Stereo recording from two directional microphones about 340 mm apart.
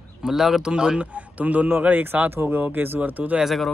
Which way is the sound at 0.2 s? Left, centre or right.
Centre.